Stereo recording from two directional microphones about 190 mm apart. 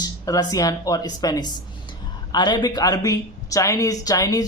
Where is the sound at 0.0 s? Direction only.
20° left (ahead or behind).